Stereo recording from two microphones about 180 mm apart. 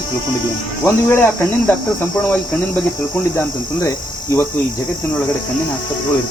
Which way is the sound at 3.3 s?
15° left (ahead or behind).